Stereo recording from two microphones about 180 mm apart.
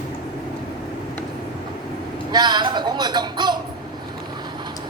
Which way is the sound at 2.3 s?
25° right (ahead or behind).